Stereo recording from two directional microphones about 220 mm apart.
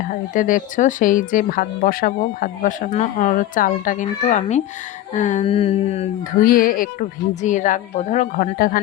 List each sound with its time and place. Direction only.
0.0 s speech: 40° left (ahead or behind)